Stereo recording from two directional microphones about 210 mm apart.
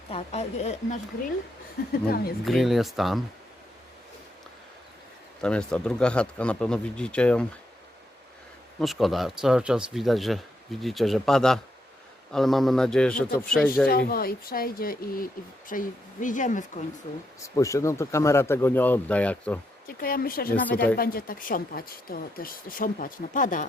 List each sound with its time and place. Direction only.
0.1 s speech: 30° left (ahead or behind)
1.9 s speech: 45° left (ahead or behind)
2.4 s speech: centre (ahead or behind)
5.4 s speech: 5° left (ahead or behind)
8.8 s speech: centre (ahead or behind)
13.8 s speech: 45° left (ahead or behind)
17.5 s speech: 15° left (ahead or behind)
20.0 s speech: 45° left (ahead or behind)
20.5 s speech: 5° left (ahead or behind)
20.7 s speech: 45° left (ahead or behind)